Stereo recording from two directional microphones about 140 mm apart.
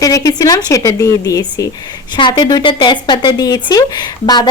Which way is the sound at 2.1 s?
35° left (ahead or behind).